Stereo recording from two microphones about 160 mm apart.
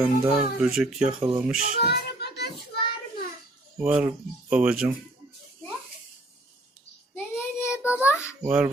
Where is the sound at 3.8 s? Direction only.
10° right (ahead or behind).